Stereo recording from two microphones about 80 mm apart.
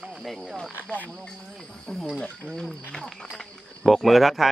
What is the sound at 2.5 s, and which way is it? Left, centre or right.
Speech, centre.